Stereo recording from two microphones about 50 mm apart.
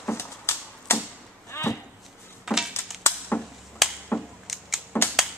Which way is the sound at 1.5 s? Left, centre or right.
Left.